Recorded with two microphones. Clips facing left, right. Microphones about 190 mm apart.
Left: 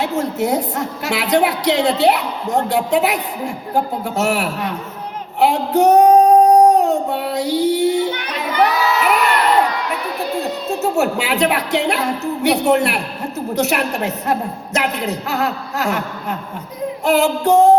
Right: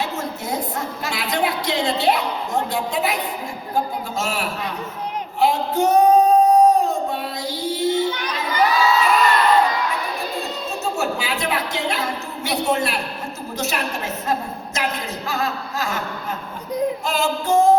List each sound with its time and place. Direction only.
0.0 s a woman's voice: 70° left (ahead or behind)
5.4 s child singing: 70° left (ahead or behind)
10.4 s a woman's voice: 70° left (ahead or behind)
17.1 s a woman's voice: 70° left (ahead or behind)